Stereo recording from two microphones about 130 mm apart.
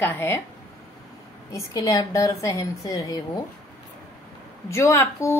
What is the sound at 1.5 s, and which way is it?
A woman's voice, 25° left (ahead or behind).